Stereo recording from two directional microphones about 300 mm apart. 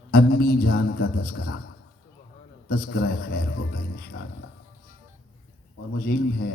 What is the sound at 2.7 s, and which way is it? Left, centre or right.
A man's voice, left.